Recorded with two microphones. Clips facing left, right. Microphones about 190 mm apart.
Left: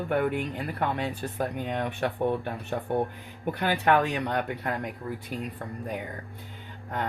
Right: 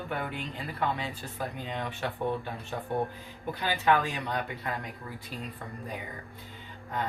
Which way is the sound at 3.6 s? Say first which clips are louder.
Left 3 dB; 55° left (ahead or behind).